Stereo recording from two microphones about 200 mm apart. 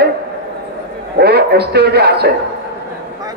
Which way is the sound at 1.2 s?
55° right (ahead or behind).